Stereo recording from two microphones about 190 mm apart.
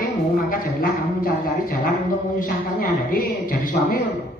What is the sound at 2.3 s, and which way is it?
A woman's voice, 45° left (ahead or behind).